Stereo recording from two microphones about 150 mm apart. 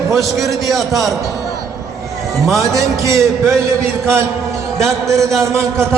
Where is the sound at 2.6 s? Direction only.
20° right (ahead or behind).